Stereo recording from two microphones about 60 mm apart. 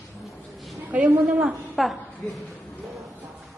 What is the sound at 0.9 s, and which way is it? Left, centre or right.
Speech, right.